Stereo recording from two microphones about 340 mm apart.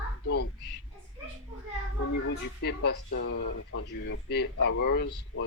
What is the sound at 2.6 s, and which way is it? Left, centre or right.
Speech, left.